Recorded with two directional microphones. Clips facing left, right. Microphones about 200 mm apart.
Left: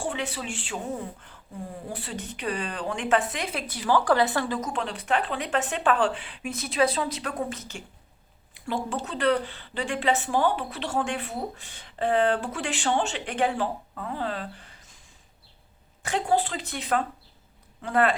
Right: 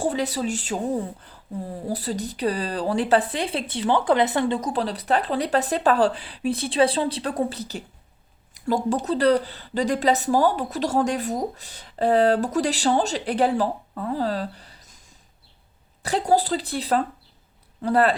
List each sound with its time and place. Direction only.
0.0 s speech: 40° right (ahead or behind)
16.0 s speech: 40° right (ahead or behind)